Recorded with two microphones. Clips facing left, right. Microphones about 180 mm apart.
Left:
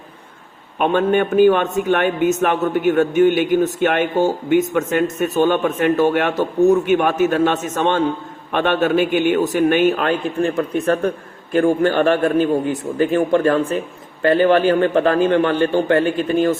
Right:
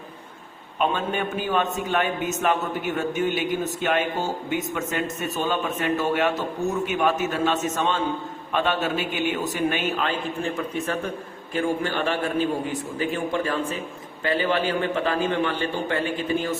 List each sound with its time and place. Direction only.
0.8 s a man's voice: 60° left (ahead or behind)